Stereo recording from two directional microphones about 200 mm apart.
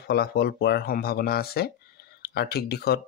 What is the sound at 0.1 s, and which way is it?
Speech, 50° left (ahead or behind).